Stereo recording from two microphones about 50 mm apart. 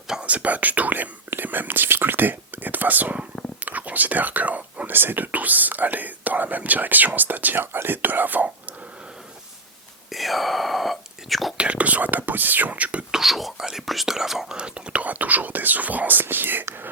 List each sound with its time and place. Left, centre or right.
0.3 s speech: right
10.1 s whispering: centre
11.5 s speech: right
13.1 s speech: centre
14.5 s speech: centre; by 16.6 s right